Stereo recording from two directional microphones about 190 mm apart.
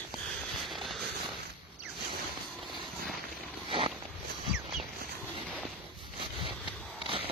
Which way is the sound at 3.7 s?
30° right (ahead or behind).